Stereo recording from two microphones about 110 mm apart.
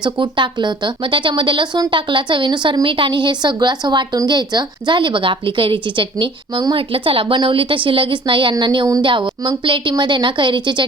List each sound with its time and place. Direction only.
0.0 s speech: 45° right (ahead or behind)
6.7 s speech: 55° right (ahead or behind)